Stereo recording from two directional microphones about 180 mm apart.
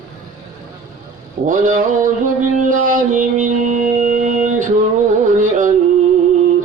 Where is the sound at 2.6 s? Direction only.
50° right (ahead or behind).